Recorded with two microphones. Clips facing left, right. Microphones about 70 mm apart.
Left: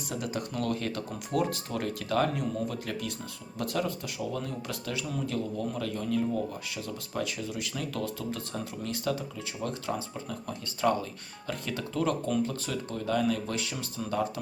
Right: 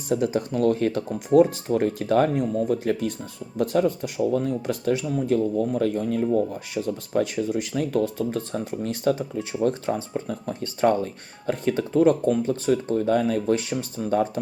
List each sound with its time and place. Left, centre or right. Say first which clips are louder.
0.1 s speech: right 11 dB; right